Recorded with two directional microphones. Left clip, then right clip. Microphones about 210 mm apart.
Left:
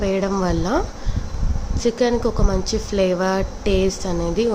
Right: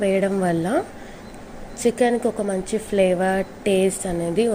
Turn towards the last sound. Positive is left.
turn(degrees=0)  # may be behind; listen again after turning